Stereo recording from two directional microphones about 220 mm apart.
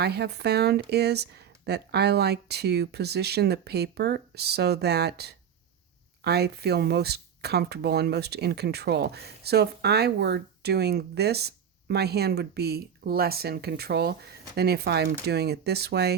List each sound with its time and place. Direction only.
0.0 s speech: 50° right (ahead or behind)